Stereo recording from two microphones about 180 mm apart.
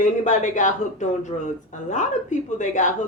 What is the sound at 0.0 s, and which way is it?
Speech, 45° left (ahead or behind).